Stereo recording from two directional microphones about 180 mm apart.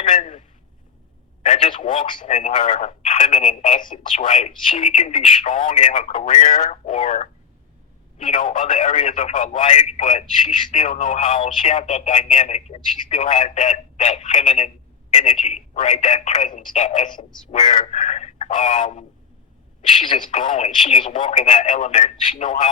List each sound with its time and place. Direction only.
0.0 s a sound: 45° left (ahead or behind)
2.1 s speech: 45° left (ahead or behind)
20.1 s speech: 45° left (ahead or behind)